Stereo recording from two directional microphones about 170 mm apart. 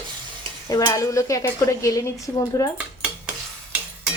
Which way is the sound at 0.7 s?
20° left (ahead or behind).